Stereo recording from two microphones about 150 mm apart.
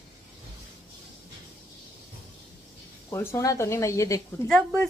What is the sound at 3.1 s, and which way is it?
Speech, 15° left (ahead or behind).